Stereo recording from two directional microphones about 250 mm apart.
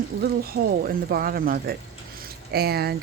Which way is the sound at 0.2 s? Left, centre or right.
Right.